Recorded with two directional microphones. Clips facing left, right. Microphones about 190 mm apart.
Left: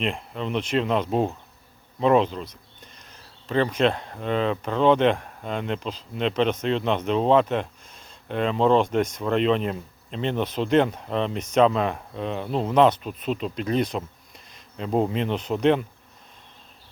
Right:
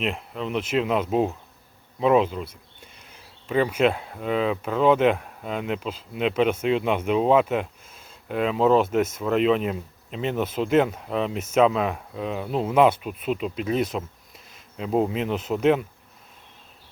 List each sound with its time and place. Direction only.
0.0 s speech: 5° right (ahead or behind)